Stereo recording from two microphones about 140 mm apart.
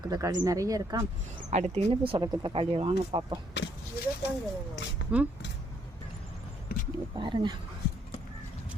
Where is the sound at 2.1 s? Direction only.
35° right (ahead or behind).